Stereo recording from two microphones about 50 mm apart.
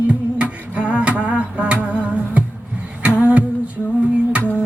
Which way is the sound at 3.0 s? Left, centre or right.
Right.